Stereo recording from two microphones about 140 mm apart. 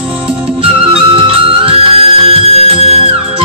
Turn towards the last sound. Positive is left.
turn(degrees=-45)  # may be behind; listen again after turning